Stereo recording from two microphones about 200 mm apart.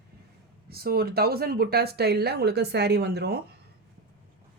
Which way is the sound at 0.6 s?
50° right (ahead or behind).